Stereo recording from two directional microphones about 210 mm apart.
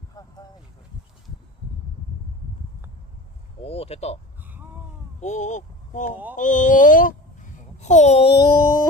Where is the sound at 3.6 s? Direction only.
30° left (ahead or behind).